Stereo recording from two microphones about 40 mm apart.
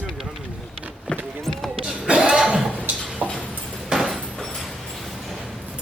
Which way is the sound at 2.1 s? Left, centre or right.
Centre.